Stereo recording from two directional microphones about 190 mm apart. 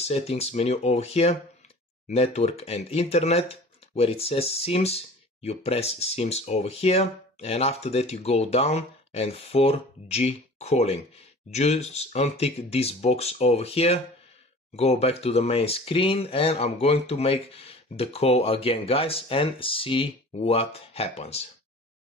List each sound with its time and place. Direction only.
0.0 s speech: 35° left (ahead or behind)